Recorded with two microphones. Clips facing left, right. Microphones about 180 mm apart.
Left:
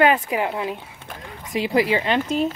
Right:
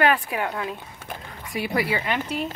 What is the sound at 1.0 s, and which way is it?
Horse, 20° left (ahead or behind).